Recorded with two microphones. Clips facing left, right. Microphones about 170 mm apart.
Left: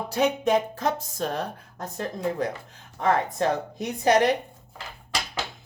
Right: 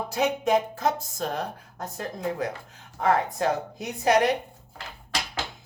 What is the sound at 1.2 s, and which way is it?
Speech, 35° left (ahead or behind).